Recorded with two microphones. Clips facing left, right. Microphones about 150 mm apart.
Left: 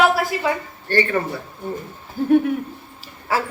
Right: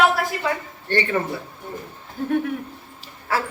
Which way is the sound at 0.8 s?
20° right (ahead or behind).